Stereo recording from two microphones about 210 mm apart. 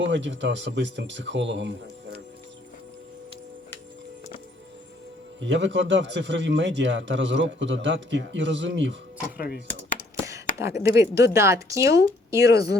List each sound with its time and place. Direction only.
0.0 s a man's voice: 60° right (ahead or behind)
5.4 s a man's voice: 60° right (ahead or behind)
10.2 s speech: 15° right (ahead or behind)
12.5 s speech: 50° left (ahead or behind)